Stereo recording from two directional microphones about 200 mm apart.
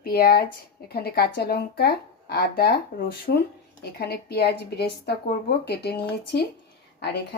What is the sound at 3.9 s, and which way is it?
A woman's voice, 55° left (ahead or behind).